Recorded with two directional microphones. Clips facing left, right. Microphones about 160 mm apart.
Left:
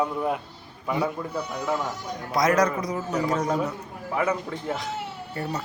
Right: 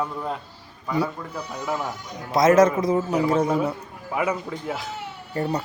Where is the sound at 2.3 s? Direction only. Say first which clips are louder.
Right 6 dB; 25° right (ahead or behind).